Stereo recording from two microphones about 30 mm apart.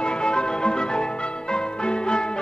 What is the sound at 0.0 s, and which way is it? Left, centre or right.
Music, left.